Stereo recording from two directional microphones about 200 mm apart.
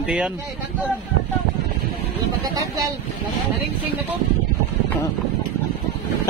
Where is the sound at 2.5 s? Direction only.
20° right (ahead or behind).